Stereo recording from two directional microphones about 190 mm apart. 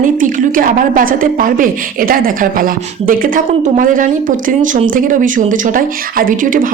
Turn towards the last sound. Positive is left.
turn(degrees=-45)  # may be behind; listen again after turning